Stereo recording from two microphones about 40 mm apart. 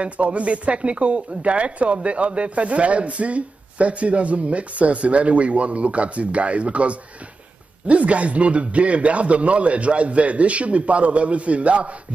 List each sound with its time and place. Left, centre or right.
0.0 s speech: right